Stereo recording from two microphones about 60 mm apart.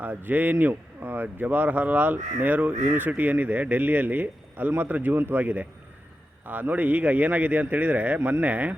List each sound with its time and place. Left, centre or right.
0.0 s a man's voice: right